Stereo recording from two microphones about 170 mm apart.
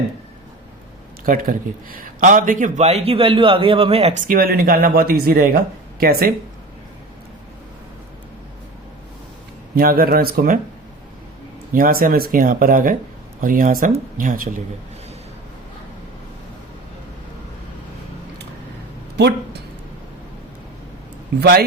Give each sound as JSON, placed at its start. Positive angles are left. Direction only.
{"t": 1.2, "sound": "a man's voice", "side_deg": -55}
{"t": 9.7, "sound": "speech", "side_deg": -60}
{"t": 11.7, "sound": "a man's voice", "side_deg": -60}